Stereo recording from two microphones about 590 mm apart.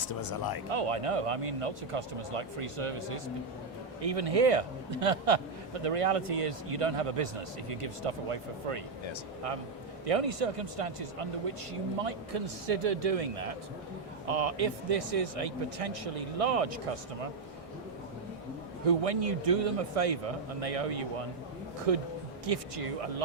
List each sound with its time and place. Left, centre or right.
0.1 s speech: left
0.7 s a man's voice: right
4.0 s a man's voice: right
10.1 s a man's voice: right
18.9 s a man's voice: right